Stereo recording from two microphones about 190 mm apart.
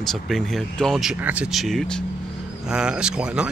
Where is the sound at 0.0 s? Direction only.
Centre (ahead or behind).